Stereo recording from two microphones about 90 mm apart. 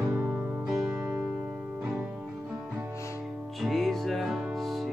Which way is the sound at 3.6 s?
Centre (ahead or behind).